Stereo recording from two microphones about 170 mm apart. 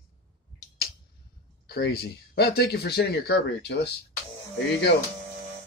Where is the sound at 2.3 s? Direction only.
65° left (ahead or behind).